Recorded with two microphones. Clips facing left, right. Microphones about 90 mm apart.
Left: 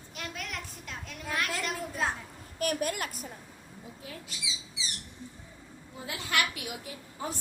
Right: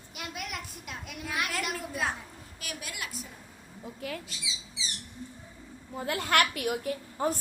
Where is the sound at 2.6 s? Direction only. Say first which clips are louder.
Left 10 dB; 45° left (ahead or behind).